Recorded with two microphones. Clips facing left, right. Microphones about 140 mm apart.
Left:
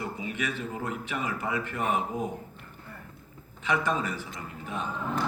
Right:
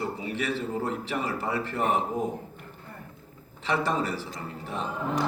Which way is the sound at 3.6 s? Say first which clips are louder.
Right 1 dB; 35° right (ahead or behind).